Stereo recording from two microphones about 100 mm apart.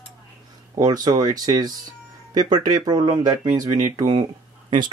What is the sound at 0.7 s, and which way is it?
Speech, 40° right (ahead or behind).